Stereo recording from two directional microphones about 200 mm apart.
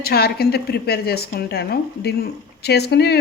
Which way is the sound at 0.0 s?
50° left (ahead or behind).